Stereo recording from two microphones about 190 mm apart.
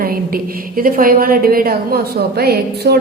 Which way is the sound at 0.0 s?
50° right (ahead or behind).